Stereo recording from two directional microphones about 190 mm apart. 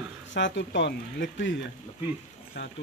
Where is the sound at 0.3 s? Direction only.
70° left (ahead or behind).